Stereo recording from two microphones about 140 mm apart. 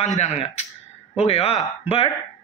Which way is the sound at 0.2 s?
50° left (ahead or behind).